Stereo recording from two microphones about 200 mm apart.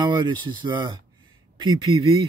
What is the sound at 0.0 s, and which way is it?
Speech, 20° right (ahead or behind).